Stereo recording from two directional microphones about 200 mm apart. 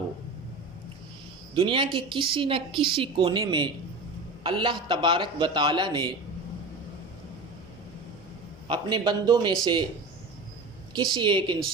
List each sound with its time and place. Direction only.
1.5 s a woman's voice: 25° right (ahead or behind)
8.6 s a woman's voice: 25° right (ahead or behind)
10.9 s a woman's voice: 20° right (ahead or behind)